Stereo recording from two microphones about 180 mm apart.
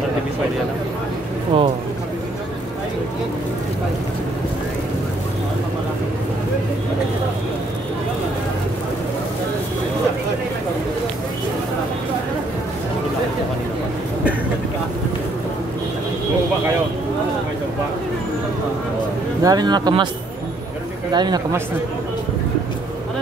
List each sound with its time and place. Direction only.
1.5 s speech: 30° right (ahead or behind)
19.4 s speech: 25° right (ahead or behind)
21.1 s speech: 25° right (ahead or behind)